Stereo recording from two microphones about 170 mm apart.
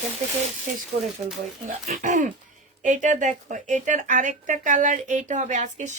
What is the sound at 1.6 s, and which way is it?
Speech, 45° right (ahead or behind).